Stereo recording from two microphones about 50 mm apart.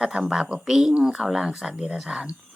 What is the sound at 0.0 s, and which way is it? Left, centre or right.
Speech, centre.